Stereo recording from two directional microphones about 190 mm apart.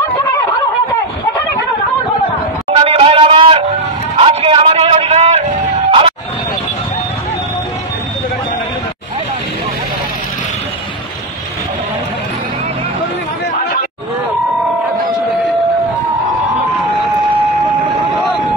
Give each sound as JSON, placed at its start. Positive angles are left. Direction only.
{"t": 2.7, "sound": "music", "side_deg": -30}
{"t": 4.2, "sound": "a sound", "side_deg": -30}
{"t": 5.9, "sound": "music", "side_deg": -30}